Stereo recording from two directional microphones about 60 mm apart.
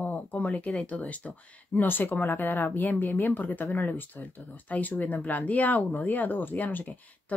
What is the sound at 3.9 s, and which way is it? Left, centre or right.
Speech, left.